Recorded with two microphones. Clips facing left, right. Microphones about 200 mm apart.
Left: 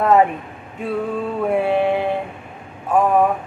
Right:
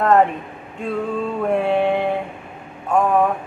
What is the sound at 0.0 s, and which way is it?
Male singing, 5° left (ahead or behind).